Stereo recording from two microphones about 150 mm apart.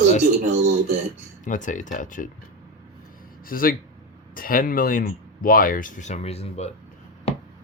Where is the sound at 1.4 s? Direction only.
60° left (ahead or behind).